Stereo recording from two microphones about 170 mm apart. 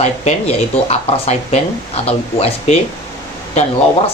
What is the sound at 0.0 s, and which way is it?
Speech, 40° left (ahead or behind).